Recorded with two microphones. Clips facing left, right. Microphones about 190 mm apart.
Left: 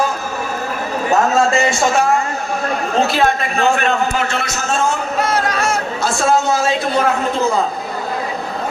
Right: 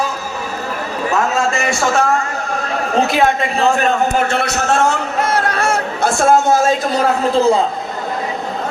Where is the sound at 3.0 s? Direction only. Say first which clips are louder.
Right 2 dB; 15° right (ahead or behind).